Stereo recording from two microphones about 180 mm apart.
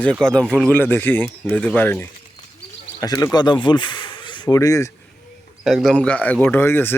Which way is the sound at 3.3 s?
25° left (ahead or behind).